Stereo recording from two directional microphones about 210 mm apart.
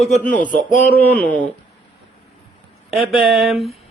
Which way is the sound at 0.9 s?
10° left (ahead or behind).